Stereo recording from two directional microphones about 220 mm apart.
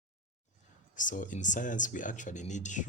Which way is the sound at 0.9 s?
35° left (ahead or behind).